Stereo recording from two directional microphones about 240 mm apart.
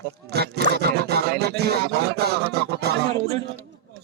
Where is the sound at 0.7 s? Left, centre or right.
Right.